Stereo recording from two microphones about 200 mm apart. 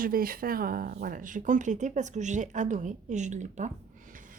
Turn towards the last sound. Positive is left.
turn(degrees=-40)  # may be behind; listen again after turning